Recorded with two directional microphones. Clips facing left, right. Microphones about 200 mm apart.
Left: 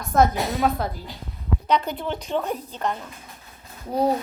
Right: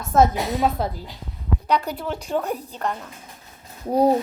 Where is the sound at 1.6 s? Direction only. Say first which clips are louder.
Even; 5° right (ahead or behind).